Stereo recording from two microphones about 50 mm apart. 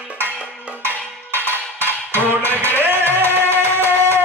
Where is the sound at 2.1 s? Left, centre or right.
Left.